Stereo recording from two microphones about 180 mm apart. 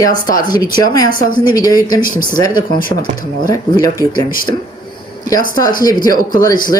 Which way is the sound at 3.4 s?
20° left (ahead or behind).